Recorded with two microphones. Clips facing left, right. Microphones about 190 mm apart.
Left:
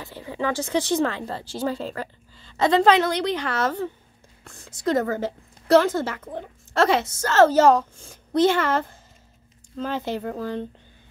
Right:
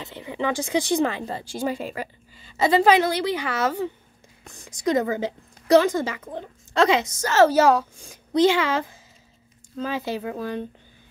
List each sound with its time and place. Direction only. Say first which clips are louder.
0.0 s a woman's voice: even; 20° right (ahead or behind)